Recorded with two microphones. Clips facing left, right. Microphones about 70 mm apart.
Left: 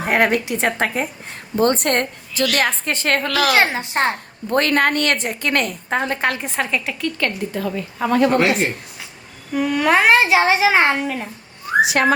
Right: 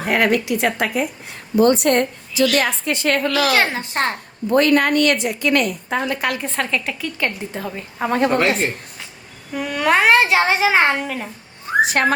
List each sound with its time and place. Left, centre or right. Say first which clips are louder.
0.0 s a woman's voice: even; left
3.5 s speech: left 1 dB; left
4.5 s a woman's voice: right 2 dB; left
6.4 s a woman's voice: even; centre
7.2 s a woman's voice: left 1 dB; right
9.5 s a child's voice: left 2 dB; centre
11.8 s whistling: even; right